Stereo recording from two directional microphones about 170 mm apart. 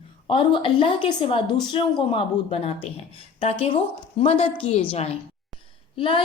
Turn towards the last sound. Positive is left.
turn(degrees=30)  # may be behind; listen again after turning